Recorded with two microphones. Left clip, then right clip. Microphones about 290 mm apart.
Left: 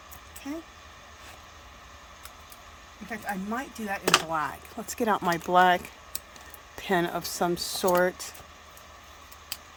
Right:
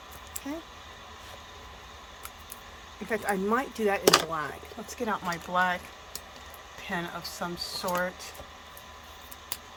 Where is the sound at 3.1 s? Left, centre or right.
Centre.